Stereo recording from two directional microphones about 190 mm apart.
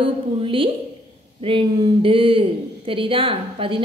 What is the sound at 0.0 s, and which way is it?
A woman's voice, 30° right (ahead or behind).